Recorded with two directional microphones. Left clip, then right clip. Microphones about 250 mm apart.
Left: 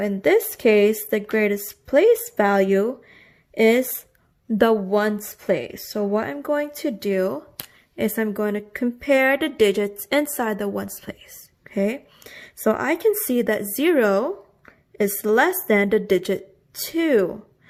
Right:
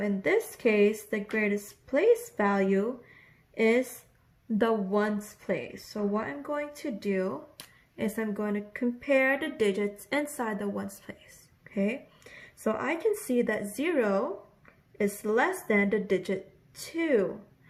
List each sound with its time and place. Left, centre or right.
0.0 s a woman's voice: left